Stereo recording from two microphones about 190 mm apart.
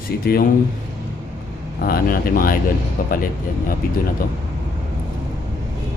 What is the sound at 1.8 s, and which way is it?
Speech, 50° left (ahead or behind).